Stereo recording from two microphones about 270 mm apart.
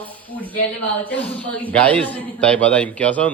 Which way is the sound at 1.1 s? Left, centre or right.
Centre.